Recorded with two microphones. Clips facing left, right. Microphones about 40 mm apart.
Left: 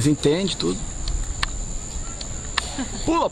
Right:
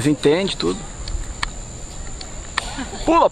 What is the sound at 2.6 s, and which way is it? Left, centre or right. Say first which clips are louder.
Speech: right 6 dB; right.